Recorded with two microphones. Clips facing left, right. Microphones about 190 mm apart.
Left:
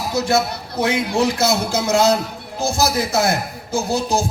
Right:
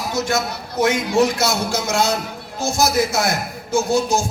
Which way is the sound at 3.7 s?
35° left (ahead or behind).